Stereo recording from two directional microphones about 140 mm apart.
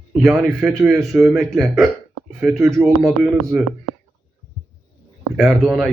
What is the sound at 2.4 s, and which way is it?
Speech, 20° right (ahead or behind).